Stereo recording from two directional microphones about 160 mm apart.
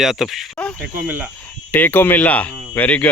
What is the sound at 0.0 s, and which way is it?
Speech, centre (ahead or behind).